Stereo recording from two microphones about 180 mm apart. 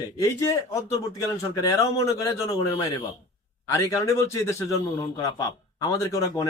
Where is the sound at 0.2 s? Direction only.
15° left (ahead or behind).